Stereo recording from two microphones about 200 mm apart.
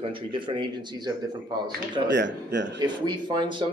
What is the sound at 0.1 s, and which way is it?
A man's voice, 25° right (ahead or behind).